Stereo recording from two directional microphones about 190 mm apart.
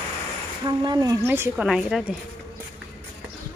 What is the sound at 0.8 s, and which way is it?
Speech, 20° right (ahead or behind).